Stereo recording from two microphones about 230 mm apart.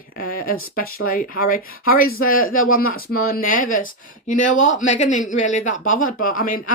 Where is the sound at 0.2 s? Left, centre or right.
Left.